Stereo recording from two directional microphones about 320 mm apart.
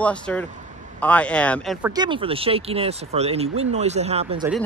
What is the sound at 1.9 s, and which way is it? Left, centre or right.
Speech, centre.